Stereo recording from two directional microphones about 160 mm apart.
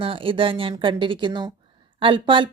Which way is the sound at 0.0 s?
35° right (ahead or behind).